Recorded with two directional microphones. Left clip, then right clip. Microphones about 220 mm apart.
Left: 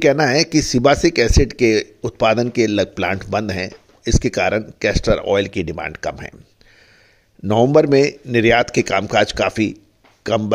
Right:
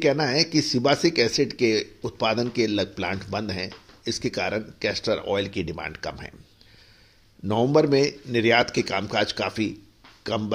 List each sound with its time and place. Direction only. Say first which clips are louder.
0.0 s speech: left 7 dB; 50° left (ahead or behind)
7.4 s speech: left 7 dB; 45° left (ahead or behind)